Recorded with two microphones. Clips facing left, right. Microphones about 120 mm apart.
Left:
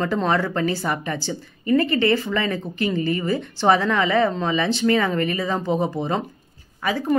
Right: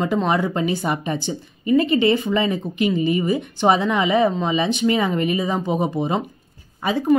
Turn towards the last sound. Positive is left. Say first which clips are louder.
# right 3 dB
turn(degrees=-20)  # may be behind; listen again after turning